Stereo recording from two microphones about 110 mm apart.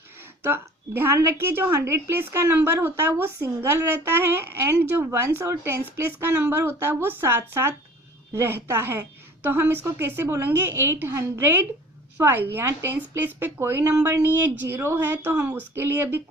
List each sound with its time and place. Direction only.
0.2 s a woman's voice: 20° right (ahead or behind)